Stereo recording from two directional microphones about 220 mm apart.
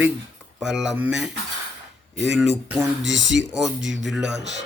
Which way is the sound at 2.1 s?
55° right (ahead or behind).